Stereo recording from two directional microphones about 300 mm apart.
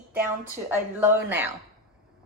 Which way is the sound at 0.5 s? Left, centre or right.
Centre.